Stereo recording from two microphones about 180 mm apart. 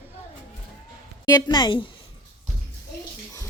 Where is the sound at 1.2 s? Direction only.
25° left (ahead or behind).